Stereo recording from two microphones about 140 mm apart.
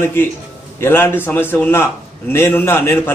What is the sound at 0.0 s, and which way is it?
A man's voice, 15° left (ahead or behind).